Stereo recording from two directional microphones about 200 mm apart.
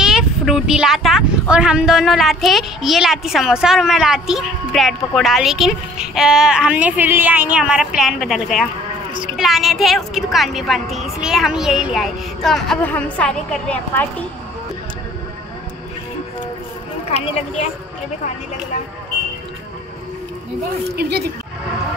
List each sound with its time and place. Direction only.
0.0 s speech: 5° right (ahead or behind)
20.9 s speech: 55° right (ahead or behind)